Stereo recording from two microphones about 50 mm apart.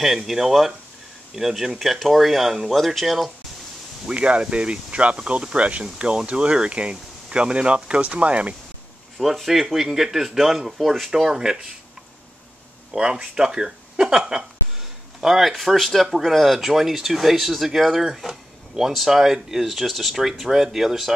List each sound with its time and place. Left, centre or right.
0.0 s speech: centre
4.1 s speech: right
9.2 s speech: centre
12.9 s speech: centre